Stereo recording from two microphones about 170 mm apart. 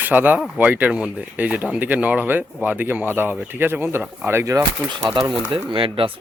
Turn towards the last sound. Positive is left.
turn(degrees=-30)  # may be behind; listen again after turning